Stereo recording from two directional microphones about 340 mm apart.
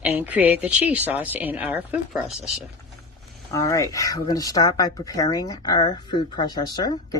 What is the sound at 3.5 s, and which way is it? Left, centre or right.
Speech, centre.